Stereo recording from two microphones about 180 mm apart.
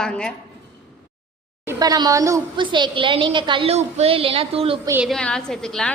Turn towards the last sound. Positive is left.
turn(degrees=5)  # may be behind; listen again after turning